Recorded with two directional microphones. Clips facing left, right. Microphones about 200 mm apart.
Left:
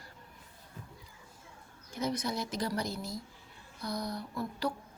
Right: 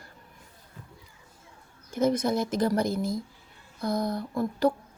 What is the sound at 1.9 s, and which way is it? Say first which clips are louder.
Speech: right 9 dB; 50° right (ahead or behind).